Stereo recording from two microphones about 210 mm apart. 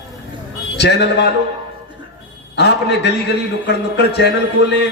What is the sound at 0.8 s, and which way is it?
Speech, 55° left (ahead or behind).